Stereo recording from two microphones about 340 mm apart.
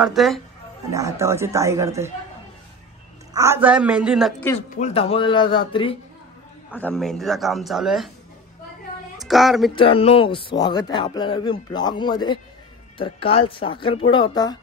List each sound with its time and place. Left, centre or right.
0.0 s a man's voice: centre
3.3 s a man's voice: centre
4.6 s speech: centre
6.7 s a man's voice: centre
9.2 s speech: centre
9.8 s speech: centre